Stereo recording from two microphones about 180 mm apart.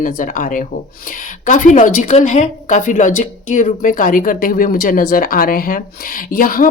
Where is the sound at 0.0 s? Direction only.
45° left (ahead or behind).